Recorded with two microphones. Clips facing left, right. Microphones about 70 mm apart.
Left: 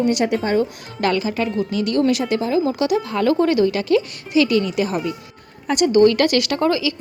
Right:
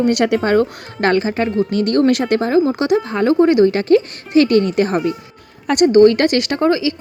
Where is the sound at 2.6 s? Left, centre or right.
Right.